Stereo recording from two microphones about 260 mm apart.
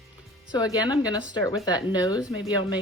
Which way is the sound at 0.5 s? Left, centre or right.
Centre.